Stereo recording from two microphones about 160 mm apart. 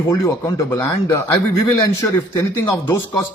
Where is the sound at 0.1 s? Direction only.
20° left (ahead or behind).